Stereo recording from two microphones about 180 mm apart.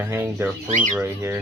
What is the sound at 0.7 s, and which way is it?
Speech, 45° right (ahead or behind).